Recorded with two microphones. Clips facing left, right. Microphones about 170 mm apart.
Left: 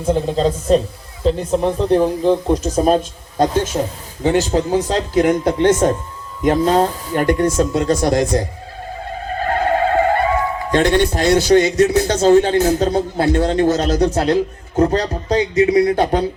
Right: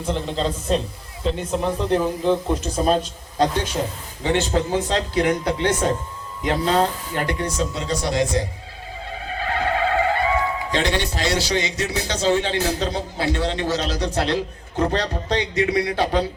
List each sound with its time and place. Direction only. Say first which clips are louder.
0.0 s speech: left 7 dB; 45° left (ahead or behind)